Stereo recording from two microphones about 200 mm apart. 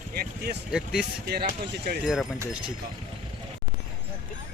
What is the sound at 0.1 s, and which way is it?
Speech, 50° right (ahead or behind).